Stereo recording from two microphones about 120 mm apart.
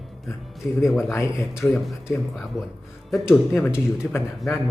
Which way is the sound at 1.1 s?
25° left (ahead or behind).